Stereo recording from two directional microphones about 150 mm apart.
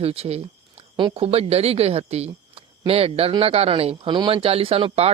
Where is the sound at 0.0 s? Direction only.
40° right (ahead or behind).